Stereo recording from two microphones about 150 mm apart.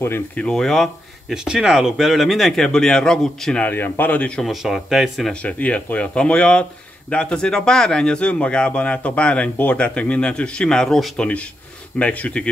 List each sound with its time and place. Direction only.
0.0 s speech: 15° left (ahead or behind)
0.5 s a man's voice: 5° left (ahead or behind)